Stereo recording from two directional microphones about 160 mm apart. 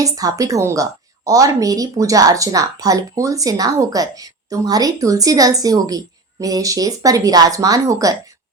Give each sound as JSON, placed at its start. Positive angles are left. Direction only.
{"t": 0.0, "sound": "a woman's voice", "side_deg": -20}